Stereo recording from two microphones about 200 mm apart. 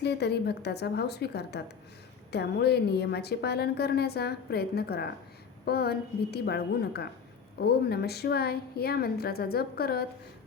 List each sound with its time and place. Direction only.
0.0 s a woman's voice: 55° left (ahead or behind)